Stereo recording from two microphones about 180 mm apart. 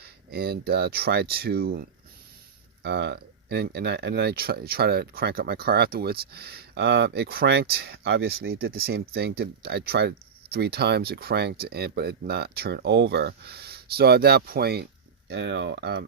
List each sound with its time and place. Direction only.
0.0 s speech: 60° right (ahead or behind)
2.8 s speech: 70° right (ahead or behind)
15.3 s speech: 75° right (ahead or behind)